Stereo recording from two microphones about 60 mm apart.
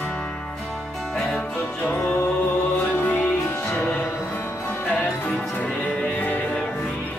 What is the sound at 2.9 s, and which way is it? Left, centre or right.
Music, left.